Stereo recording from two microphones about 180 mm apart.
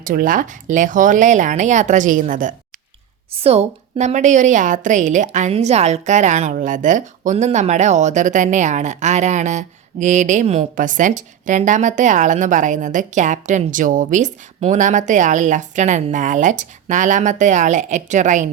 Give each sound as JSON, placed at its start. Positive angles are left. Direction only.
{"t": 0.0, "sound": "a woman's voice", "side_deg": -50}
{"t": 3.3, "sound": "a woman's voice", "side_deg": -35}